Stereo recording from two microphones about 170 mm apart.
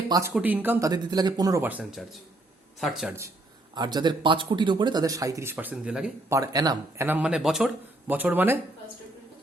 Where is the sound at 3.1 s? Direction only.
15° right (ahead or behind).